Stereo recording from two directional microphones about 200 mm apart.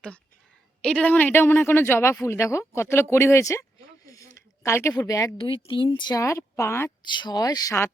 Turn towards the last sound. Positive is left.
turn(degrees=15)  # may be behind; listen again after turning